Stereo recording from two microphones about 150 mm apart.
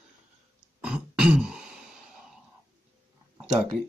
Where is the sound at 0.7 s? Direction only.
5° right (ahead or behind).